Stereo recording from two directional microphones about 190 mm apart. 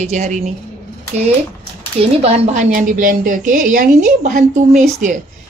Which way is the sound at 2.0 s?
30° right (ahead or behind).